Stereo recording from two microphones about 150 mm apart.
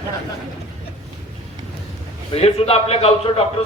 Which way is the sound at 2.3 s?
40° left (ahead or behind).